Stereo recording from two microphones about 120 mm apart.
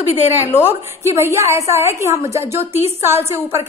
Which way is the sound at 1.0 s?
25° right (ahead or behind).